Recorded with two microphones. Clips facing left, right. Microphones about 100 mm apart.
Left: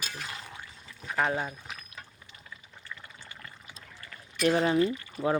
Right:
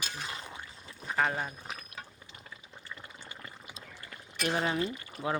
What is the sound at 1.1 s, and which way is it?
Speech, 5° left (ahead or behind).